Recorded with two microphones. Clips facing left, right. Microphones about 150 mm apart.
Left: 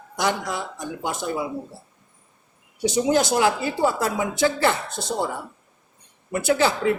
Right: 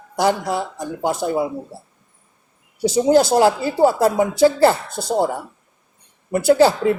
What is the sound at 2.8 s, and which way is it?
Speech, 35° right (ahead or behind).